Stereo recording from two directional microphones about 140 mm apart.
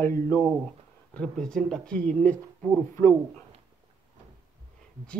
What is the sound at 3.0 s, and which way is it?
Speech, 20° left (ahead or behind).